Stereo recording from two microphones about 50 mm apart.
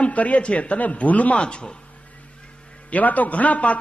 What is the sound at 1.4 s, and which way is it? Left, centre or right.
Speech, centre.